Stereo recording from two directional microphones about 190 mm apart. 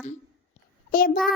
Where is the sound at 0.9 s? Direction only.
45° left (ahead or behind).